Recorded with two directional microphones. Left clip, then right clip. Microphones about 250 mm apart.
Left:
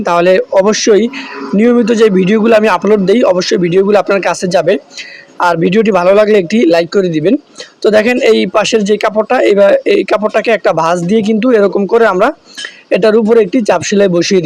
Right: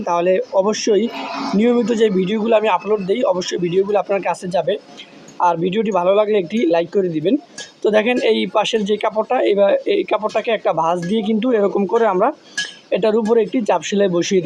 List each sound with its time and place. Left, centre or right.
0.0 s a man's voice: left